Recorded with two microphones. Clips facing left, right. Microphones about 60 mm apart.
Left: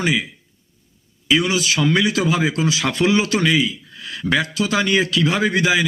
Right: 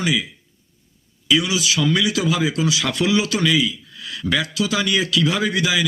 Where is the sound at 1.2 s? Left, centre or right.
Left.